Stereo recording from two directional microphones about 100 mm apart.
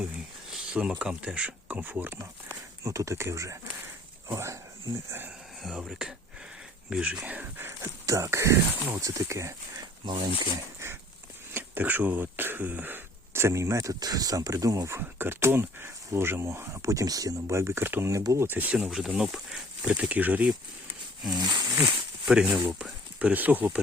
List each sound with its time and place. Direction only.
0.5 s speech: 10° right (ahead or behind)
2.8 s speech: 30° right (ahead or behind)
5.6 s speech: 5° right (ahead or behind)
8.0 s speech: 30° right (ahead or behind)
10.0 s speech: 60° right (ahead or behind)
11.5 s speech: 20° right (ahead or behind)
18.1 s speech: 35° right (ahead or behind)
18.4 s speech: 20° right (ahead or behind)
21.3 s speech: 45° right (ahead or behind)
22.4 s speech: 25° right (ahead or behind)